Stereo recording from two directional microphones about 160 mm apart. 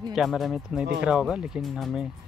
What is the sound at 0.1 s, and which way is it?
Speech, centre (ahead or behind).